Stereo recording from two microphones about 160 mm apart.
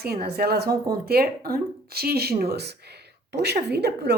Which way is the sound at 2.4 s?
90° right.